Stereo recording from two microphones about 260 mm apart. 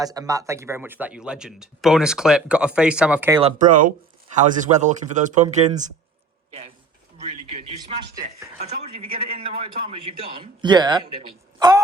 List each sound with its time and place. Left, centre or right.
0.0 s speech: centre
3.4 s a man's voice: right
7.2 s a man's voice: right
10.1 s a man's voice: centre